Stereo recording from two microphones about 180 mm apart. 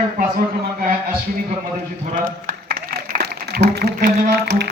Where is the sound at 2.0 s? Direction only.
45° right (ahead or behind).